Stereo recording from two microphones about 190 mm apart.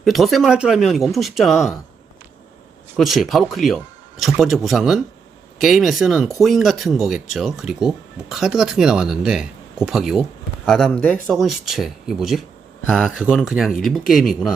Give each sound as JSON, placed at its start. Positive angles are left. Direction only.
{"t": 0.0, "sound": "speech", "side_deg": 0}
{"t": 3.0, "sound": "speech", "side_deg": 0}